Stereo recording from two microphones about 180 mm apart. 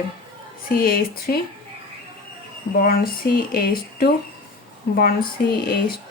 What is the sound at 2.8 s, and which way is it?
Speech, 55° left (ahead or behind).